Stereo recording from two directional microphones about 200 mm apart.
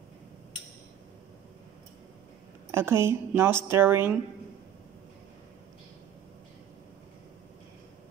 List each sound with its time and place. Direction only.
2.7 s speech: 10° right (ahead or behind)